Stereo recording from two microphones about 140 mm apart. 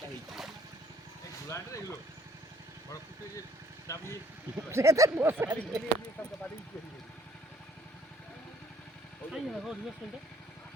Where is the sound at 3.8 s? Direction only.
20° left (ahead or behind).